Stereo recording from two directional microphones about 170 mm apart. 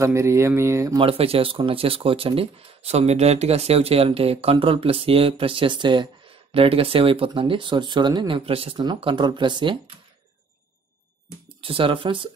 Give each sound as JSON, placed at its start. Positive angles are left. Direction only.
{"t": 0.0, "sound": "speech", "side_deg": -15}
{"t": 0.9, "sound": "speech", "side_deg": -35}
{"t": 11.6, "sound": "speech", "side_deg": -30}